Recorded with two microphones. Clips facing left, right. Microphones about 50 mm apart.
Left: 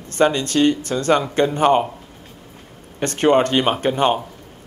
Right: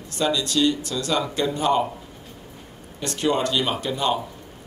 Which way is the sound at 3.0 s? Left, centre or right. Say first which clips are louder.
Left 7 dB; left.